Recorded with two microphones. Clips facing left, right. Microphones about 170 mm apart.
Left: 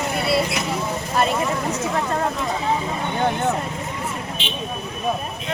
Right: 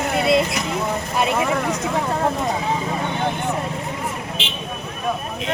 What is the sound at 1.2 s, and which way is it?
Speech, 65° right (ahead or behind).